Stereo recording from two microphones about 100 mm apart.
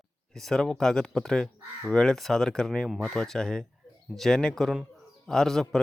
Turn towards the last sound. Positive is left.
turn(degrees=5)  # may be behind; listen again after turning